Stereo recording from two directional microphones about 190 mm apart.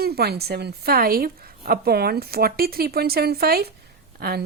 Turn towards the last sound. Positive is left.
turn(degrees=-55)  # may be behind; listen again after turning